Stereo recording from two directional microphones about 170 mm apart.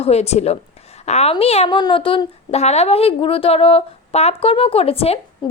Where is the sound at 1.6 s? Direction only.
25° left (ahead or behind).